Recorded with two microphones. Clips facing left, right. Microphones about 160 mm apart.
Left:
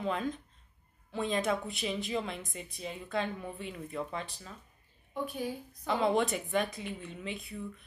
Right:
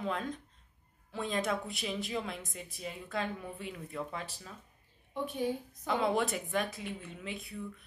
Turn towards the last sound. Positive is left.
turn(degrees=0)  # may be behind; listen again after turning